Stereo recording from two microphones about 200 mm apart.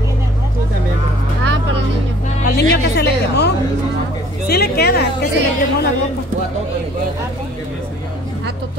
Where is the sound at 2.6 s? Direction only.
55° left (ahead or behind).